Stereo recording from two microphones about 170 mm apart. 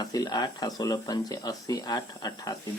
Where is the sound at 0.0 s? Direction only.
20° left (ahead or behind).